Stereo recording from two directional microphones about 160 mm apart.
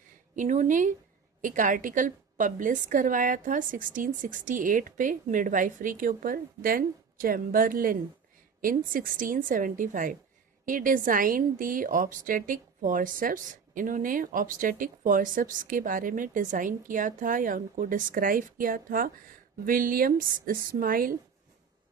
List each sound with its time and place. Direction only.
0.3 s a woman's voice: 50° right (ahead or behind)